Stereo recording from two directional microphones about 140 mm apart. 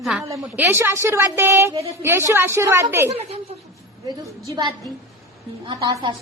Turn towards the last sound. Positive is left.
turn(degrees=-25)  # may be behind; listen again after turning